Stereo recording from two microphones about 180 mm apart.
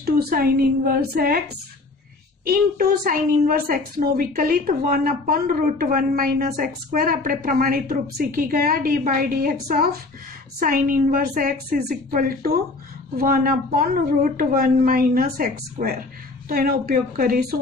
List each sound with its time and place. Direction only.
0.0 s a woman's voice: 55° right (ahead or behind)
2.4 s a woman's voice: 55° right (ahead or behind)